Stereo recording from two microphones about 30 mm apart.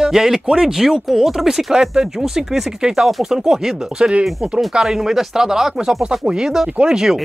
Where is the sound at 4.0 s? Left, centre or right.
Right.